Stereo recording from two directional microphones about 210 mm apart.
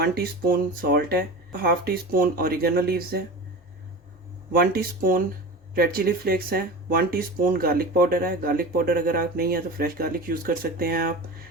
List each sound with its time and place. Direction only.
0.0 s speech: 50° right (ahead or behind)
4.5 s speech: 45° right (ahead or behind)